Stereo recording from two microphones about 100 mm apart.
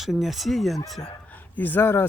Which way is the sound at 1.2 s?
15° left (ahead or behind).